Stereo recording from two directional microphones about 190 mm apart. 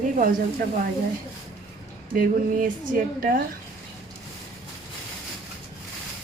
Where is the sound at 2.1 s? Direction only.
45° right (ahead or behind).